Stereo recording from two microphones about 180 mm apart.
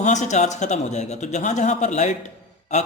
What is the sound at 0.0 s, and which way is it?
Speech, 40° left (ahead or behind).